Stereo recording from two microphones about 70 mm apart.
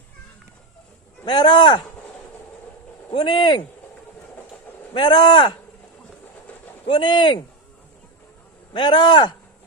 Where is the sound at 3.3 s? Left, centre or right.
Left.